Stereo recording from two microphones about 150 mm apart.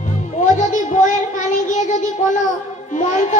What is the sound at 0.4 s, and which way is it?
Child singing, 60° left (ahead or behind).